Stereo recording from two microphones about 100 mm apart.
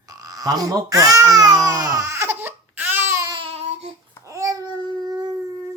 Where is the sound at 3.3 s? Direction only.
80° right.